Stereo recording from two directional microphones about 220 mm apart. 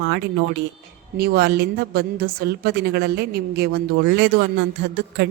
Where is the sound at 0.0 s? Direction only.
50° right (ahead or behind).